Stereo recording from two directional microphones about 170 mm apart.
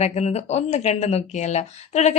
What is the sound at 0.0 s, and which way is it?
Speech, 40° left (ahead or behind).